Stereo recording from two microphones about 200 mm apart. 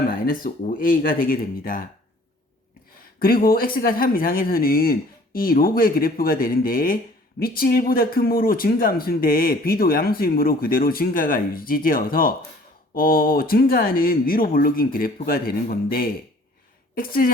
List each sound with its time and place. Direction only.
0.1 s speech: 45° left (ahead or behind)
3.2 s speech: 45° left (ahead or behind)